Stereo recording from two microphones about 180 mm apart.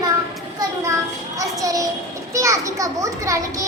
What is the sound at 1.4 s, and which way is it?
A child's voice, 20° right (ahead or behind).